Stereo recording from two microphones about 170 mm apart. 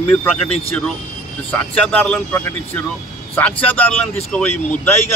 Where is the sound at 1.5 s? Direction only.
10° left (ahead or behind).